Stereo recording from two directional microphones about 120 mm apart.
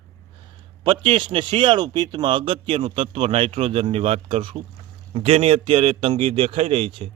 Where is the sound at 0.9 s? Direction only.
45° right (ahead or behind).